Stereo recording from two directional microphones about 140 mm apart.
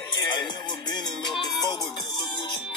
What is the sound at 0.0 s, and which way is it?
Music, 35° left (ahead or behind).